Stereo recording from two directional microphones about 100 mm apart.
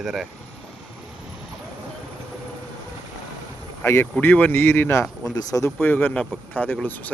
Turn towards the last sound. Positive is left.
turn(degrees=15)  # may be behind; listen again after turning